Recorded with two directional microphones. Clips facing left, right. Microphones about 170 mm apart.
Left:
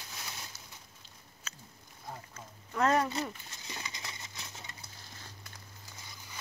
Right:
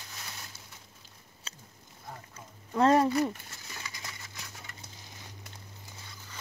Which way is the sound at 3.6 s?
20° left (ahead or behind).